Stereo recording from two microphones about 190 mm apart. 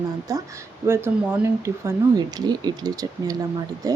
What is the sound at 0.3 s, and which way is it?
Speech, 20° right (ahead or behind).